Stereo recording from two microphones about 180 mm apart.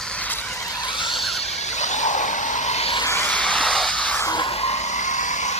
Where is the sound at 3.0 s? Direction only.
10° left (ahead or behind).